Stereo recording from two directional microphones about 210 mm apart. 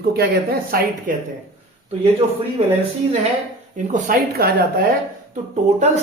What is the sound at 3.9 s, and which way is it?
Speech, 40° right (ahead or behind).